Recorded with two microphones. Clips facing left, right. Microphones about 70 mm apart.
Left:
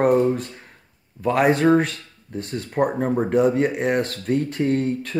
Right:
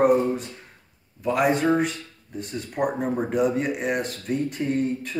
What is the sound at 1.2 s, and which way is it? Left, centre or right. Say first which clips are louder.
Speech: left 4 dB; left.